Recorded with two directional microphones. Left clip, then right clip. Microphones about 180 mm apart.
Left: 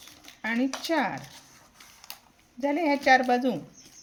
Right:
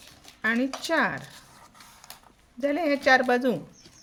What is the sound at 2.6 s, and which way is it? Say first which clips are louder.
Speech: right 1 dB; 30° right (ahead or behind).